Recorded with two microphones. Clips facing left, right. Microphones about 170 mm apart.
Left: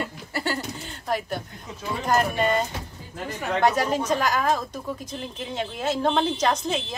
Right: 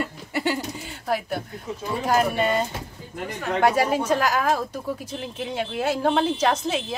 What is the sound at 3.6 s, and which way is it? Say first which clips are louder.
A woman's voice: right 2 dB; 10° right (ahead or behind).